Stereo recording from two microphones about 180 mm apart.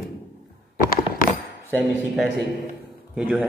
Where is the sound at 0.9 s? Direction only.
55° left (ahead or behind).